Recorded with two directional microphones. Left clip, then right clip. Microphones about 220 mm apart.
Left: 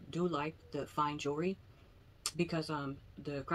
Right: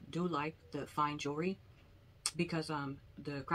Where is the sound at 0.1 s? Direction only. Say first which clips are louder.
Left 1 dB; 5° right (ahead or behind).